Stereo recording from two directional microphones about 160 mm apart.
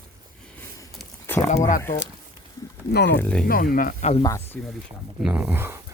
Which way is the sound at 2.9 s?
90° left.